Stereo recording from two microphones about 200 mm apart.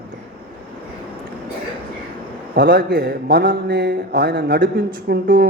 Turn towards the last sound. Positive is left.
turn(degrees=-45)  # may be behind; listen again after turning